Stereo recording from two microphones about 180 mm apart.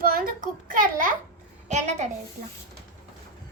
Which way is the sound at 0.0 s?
55° right (ahead or behind).